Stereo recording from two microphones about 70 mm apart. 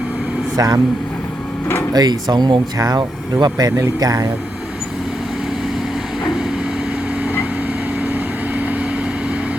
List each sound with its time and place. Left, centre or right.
0.5 s speech: right
1.9 s speech: right
3.7 s speech: right
8.0 s vehicle: right